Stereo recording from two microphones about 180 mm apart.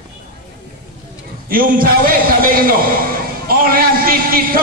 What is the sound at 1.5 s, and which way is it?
A man's voice, 55° right (ahead or behind).